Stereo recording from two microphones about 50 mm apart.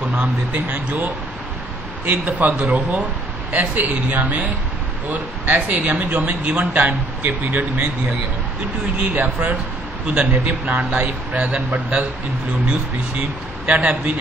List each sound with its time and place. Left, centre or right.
0.1 s speech: right
8.9 s speech: right
10.6 s speech: right
13.7 s speech: right